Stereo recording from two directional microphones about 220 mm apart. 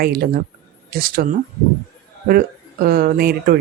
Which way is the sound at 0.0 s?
45° right (ahead or behind).